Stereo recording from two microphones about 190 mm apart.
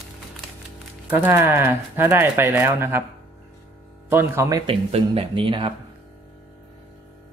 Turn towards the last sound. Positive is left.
turn(degrees=-25)  # may be behind; listen again after turning